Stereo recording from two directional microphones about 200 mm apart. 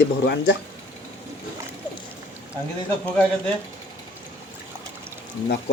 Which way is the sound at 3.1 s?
5° left (ahead or behind).